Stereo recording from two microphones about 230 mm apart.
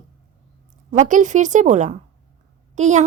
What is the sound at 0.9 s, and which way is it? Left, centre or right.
A woman's voice, right.